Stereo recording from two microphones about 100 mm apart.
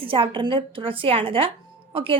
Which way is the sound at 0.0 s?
60° right (ahead or behind).